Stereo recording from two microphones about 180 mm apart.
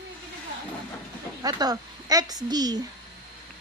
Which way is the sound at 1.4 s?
20° right (ahead or behind).